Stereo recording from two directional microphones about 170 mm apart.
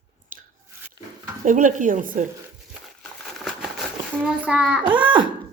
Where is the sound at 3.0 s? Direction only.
Centre (ahead or behind).